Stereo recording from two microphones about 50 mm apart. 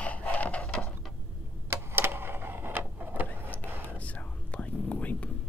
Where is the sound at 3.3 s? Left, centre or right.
Left.